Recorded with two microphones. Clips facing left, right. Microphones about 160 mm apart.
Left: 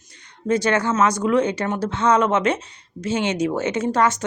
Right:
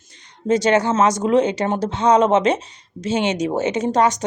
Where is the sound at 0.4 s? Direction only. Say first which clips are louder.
Right 3 dB; 20° right (ahead or behind).